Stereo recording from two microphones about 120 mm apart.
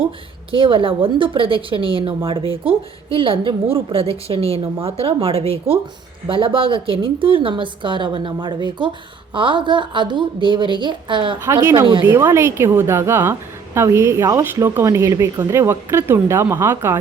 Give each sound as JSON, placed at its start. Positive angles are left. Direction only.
{"t": 0.5, "sound": "a woman's voice", "side_deg": -45}
{"t": 11.3, "sound": "speech", "side_deg": -20}